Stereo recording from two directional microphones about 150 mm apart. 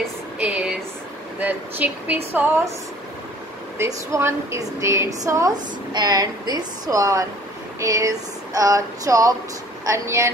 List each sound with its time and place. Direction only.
0.0 s a sound: 5° right (ahead or behind)
1.4 s speech: 10° right (ahead or behind)
3.7 s a woman's voice: 15° right (ahead or behind)